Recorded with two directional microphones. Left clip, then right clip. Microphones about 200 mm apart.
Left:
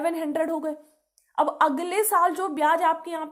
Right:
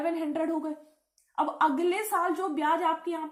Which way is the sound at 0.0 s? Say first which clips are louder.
Left 4 dB; 45° left (ahead or behind).